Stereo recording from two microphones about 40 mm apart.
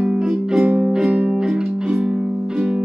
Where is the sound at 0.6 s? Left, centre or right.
Right.